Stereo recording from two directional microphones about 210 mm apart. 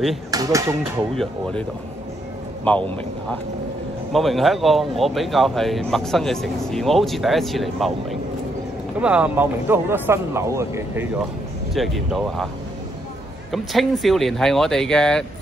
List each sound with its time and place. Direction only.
0.3 s speech: 15° right (ahead or behind)
1.1 s speech: centre (ahead or behind)
2.7 s a man's voice: 10° left (ahead or behind)
4.1 s speech: centre (ahead or behind)
11.7 s speech: centre (ahead or behind)
13.5 s speech: centre (ahead or behind)